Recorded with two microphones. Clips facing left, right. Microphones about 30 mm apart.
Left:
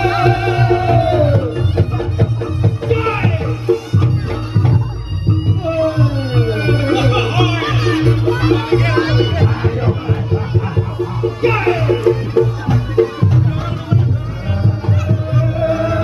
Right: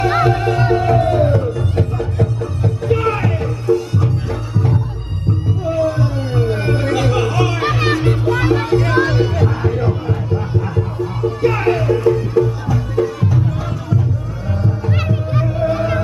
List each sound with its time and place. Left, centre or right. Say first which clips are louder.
0.0 s music: left 1 dB; left
5.3 s music: left 2 dB; left
8.5 s music: even; left